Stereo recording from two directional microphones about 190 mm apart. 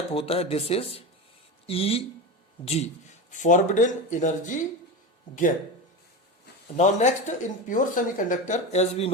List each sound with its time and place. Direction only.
0.1 s speech: 30° left (ahead or behind)
6.7 s speech: 35° left (ahead or behind)